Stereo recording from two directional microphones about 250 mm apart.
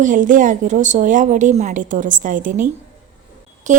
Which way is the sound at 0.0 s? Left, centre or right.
Right.